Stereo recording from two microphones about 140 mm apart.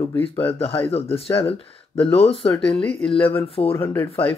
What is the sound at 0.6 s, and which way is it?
Speech, 45° left (ahead or behind).